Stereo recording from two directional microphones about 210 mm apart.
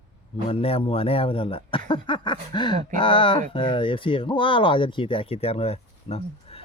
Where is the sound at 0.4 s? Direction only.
25° left (ahead or behind).